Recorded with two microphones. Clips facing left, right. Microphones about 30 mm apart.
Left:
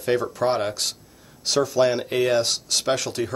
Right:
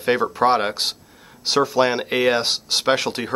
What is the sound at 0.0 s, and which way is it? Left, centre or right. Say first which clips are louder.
Speech: right 4 dB; right.